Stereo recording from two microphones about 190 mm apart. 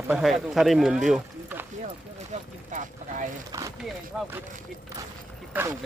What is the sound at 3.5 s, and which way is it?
Speech, 20° right (ahead or behind).